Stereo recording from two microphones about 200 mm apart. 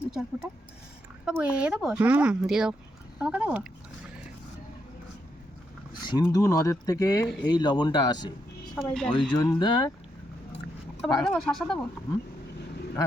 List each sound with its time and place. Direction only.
0.0 s a sound: centre (ahead or behind)
1.2 s speech: 5° right (ahead or behind)
5.9 s a sound: 20° left (ahead or behind)
6.2 s speech: 15° left (ahead or behind)
8.7 s speech: centre (ahead or behind)
9.6 s speech: 20° left (ahead or behind)
11.2 s speech: 5° left (ahead or behind)